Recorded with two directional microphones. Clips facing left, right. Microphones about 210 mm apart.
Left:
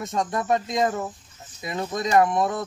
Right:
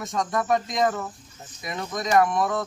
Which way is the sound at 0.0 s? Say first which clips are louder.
Even; 25° left (ahead or behind).